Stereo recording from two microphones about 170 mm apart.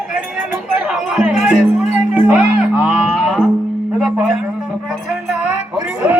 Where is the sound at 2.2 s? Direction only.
10° right (ahead or behind).